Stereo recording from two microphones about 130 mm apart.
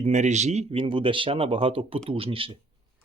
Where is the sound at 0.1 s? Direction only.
65° right (ahead or behind); by 2.5 s 45° right (ahead or behind).